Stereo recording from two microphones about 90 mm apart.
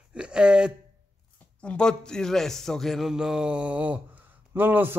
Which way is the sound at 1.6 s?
10° left (ahead or behind).